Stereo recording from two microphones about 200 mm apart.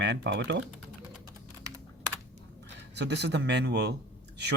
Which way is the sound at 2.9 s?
60° right (ahead or behind).